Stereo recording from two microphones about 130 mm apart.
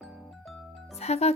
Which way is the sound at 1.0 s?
55° left (ahead or behind).